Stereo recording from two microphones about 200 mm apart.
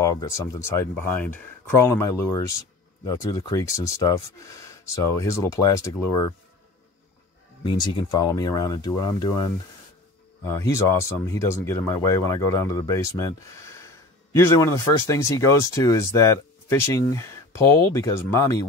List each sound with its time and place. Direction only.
0.0 s speech: 15° left (ahead or behind)
7.6 s speech: 20° left (ahead or behind)